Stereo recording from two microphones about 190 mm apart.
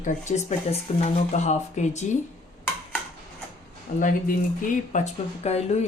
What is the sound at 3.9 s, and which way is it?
Speech, 45° left (ahead or behind).